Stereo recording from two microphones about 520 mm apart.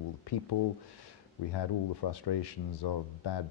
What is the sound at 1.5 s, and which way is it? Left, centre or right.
Speech, left.